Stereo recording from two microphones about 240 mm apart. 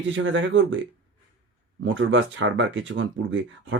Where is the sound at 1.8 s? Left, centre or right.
Right.